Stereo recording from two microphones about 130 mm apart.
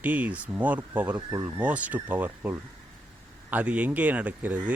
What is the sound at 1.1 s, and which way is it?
Speech, 25° right (ahead or behind).